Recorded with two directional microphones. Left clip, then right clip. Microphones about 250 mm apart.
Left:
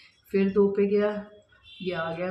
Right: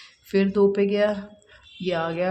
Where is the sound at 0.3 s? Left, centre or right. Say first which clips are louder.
Right 3 dB; right.